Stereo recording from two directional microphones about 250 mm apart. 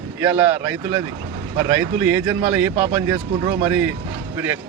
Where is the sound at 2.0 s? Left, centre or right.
Centre.